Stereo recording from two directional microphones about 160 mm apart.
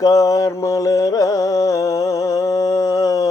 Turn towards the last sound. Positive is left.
turn(degrees=20)  # may be behind; listen again after turning